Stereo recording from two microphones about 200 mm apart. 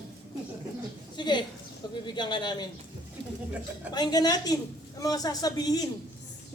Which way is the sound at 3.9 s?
20° left (ahead or behind).